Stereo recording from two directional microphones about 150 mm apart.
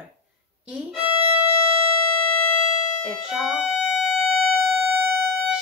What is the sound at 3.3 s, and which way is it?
Music, 5° right (ahead or behind).